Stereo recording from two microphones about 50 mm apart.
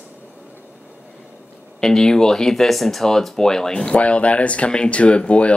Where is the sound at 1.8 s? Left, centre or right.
Centre.